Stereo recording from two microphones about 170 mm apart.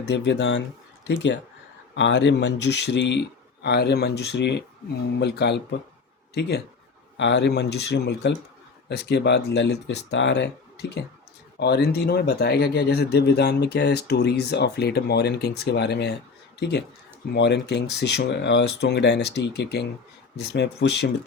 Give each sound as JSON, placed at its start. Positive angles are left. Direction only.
{"t": 0.0, "sound": "speech", "side_deg": 90}
{"t": 5.2, "sound": "speech", "side_deg": 80}
{"t": 7.2, "sound": "speech", "side_deg": 90}
{"t": 11.6, "sound": "speech", "side_deg": 75}